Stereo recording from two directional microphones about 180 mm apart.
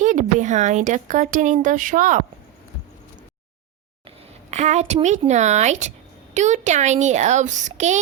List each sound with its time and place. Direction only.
0.0 s speech: 45° right (ahead or behind)
4.5 s speech: 40° right (ahead or behind)